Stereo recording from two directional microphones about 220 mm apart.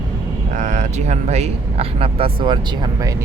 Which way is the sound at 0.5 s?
35° right (ahead or behind).